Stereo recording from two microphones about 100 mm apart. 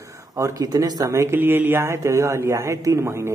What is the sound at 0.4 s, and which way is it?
A woman's voice, 30° right (ahead or behind).